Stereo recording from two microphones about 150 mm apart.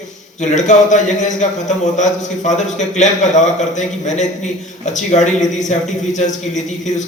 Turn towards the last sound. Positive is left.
turn(degrees=55)  # may be behind; listen again after turning